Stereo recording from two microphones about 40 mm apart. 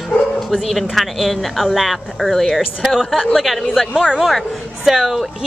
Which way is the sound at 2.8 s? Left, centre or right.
Centre.